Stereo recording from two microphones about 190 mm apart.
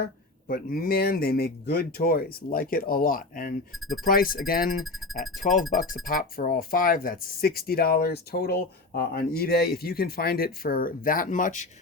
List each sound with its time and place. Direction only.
0.0 s speech: 50° left (ahead or behind)
4.8 s speech: centre (ahead or behind)
5.4 s speech: 45° left (ahead or behind)